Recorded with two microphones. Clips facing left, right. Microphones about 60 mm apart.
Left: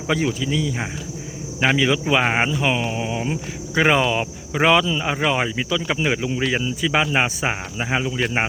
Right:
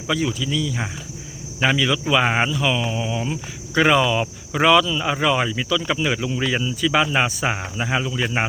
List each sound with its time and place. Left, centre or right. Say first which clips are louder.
0.1 s speech: left 1 dB; left